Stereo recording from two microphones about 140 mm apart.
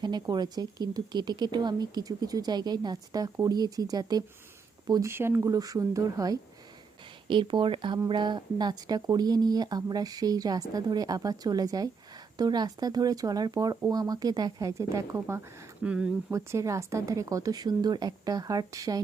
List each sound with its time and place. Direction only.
0.0 s speech: 30° right (ahead or behind)
7.3 s speech: 35° right (ahead or behind); by 15.4 s 20° right (ahead or behind)
15.8 s speech: 10° right (ahead or behind)
16.3 s speech: 20° right (ahead or behind)